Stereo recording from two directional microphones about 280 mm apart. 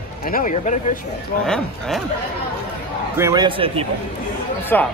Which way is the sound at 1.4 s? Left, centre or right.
Centre.